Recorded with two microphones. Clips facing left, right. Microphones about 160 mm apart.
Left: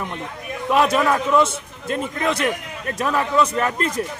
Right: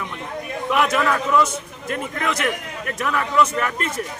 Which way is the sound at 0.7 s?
30° left (ahead or behind).